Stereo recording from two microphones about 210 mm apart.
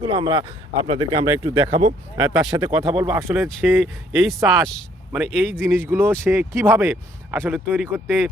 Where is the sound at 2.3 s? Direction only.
5° right (ahead or behind).